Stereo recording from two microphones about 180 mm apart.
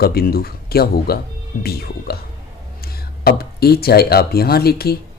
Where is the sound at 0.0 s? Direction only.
60° left (ahead or behind).